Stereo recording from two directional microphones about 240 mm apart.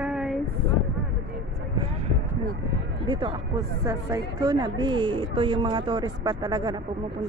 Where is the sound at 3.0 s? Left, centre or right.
Right.